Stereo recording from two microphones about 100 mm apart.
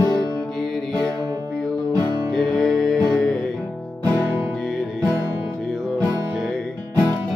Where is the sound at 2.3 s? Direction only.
Centre (ahead or behind).